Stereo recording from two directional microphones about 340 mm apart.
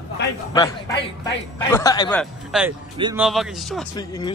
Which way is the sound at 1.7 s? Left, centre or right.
Centre.